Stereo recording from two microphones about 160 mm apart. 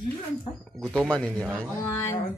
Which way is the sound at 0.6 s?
5° left (ahead or behind).